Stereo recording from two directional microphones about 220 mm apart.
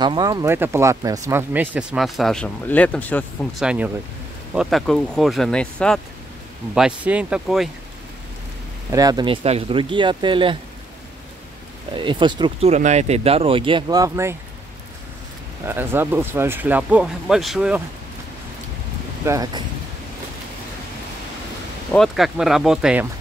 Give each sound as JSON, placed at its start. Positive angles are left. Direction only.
{"t": 0.0, "sound": "speech", "side_deg": -20}
{"t": 3.6, "sound": "speech", "side_deg": -5}
{"t": 8.9, "sound": "speech", "side_deg": -15}
{"t": 11.9, "sound": "speech", "side_deg": -20}
{"t": 15.6, "sound": "speech", "side_deg": -10}
{"t": 19.2, "sound": "speech", "side_deg": -15}
{"t": 21.9, "sound": "speech", "side_deg": 0}